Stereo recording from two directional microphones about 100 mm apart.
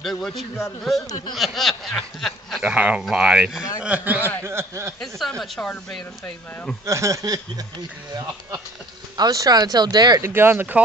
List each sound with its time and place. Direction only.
0.0 s snicker: centre (ahead or behind)
1.0 s speech: 40° left (ahead or behind)
1.3 s snicker: centre (ahead or behind)
2.6 s speech: 15° right (ahead or behind)
5.2 s snicker: centre (ahead or behind)
5.7 s speech: 10° left (ahead or behind)
6.9 s speech: 30° right (ahead or behind)
9.1 s speech: 40° right (ahead or behind)
10.2 s speech: 25° right (ahead or behind)